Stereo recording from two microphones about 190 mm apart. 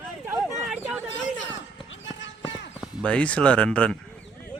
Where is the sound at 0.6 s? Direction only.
5° right (ahead or behind).